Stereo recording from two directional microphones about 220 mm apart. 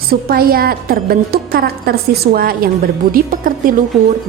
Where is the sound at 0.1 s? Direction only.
45° right (ahead or behind).